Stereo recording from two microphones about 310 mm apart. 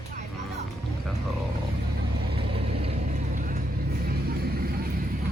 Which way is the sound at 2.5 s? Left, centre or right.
Centre.